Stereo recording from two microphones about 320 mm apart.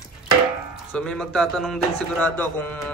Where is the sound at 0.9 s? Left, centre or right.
Centre.